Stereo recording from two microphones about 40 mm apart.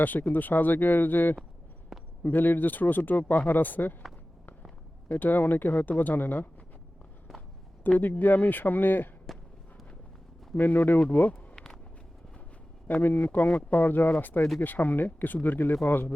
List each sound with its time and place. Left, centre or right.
0.0 s speech: left
1.9 s a sound: centre
2.2 s speech: left
5.2 s speech: left
7.9 s speech: left
9.3 s a sound: centre
10.5 s speech: left
11.1 s speech: left
11.5 s a sound: centre
13.0 s speech: left